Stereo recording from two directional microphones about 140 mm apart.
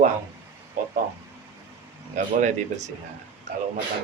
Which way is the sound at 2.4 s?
55° right (ahead or behind).